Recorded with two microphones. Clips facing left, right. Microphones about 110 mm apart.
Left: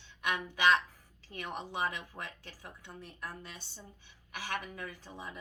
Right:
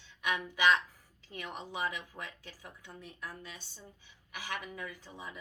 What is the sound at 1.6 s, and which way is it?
Speech, 55° left (ahead or behind).